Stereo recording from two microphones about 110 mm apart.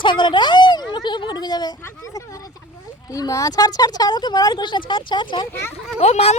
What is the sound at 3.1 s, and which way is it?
Speech, 30° left (ahead or behind).